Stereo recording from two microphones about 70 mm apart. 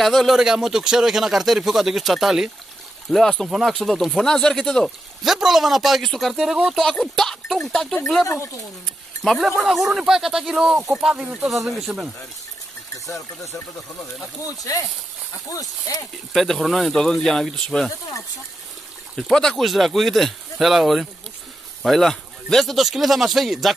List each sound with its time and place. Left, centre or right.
0.0 s speech: centre
3.1 s speech: centre
5.2 s speech: centre
9.2 s speech: centre
12.9 s speech: left
14.6 s speech: left
16.3 s speech: centre
19.3 s speech: centre